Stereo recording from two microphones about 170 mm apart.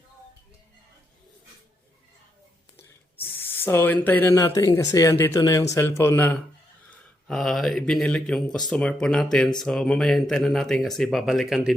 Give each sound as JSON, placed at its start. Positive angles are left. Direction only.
{"t": 3.3, "sound": "speech", "side_deg": 15}
{"t": 7.3, "sound": "speech", "side_deg": 0}